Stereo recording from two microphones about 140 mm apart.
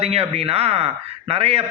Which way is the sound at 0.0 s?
45° right (ahead or behind).